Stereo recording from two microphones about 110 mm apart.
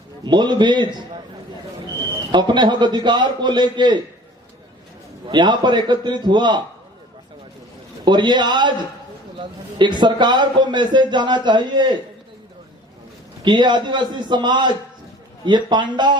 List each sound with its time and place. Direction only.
0.3 s a man's voice: 45° right (ahead or behind)
2.3 s a man's voice: 45° right (ahead or behind)
5.3 s a man's voice: 45° right (ahead or behind)
8.0 s a man's voice: 40° right (ahead or behind)
13.4 s a man's voice: 45° right (ahead or behind)